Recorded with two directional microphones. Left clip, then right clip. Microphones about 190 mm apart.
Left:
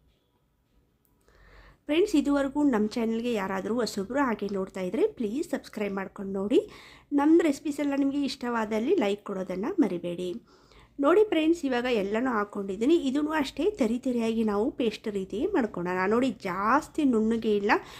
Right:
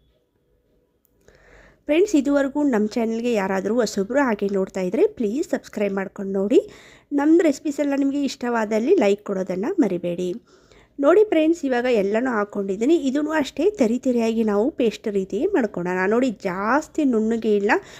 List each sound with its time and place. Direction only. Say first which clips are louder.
1.9 s a woman's voice: right 6 dB; 25° right (ahead or behind)